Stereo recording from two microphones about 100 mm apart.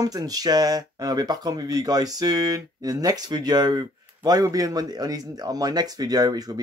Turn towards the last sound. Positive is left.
turn(degrees=-40)  # may be behind; listen again after turning